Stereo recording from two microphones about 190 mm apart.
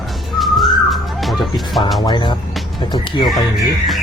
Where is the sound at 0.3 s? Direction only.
Centre (ahead or behind).